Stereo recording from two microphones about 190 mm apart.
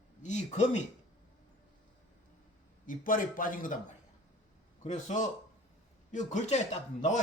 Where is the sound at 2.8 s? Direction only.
45° left (ahead or behind).